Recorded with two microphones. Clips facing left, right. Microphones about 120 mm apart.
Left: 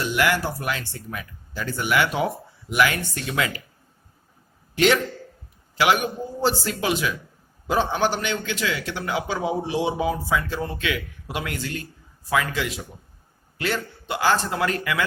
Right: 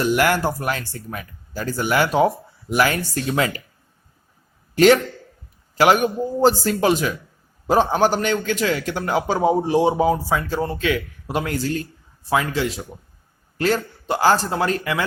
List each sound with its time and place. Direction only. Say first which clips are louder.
0.0 s a man's voice: right 4 dB; 45° right (ahead or behind)
4.7 s a man's voice: right 6 dB; 40° right (ahead or behind)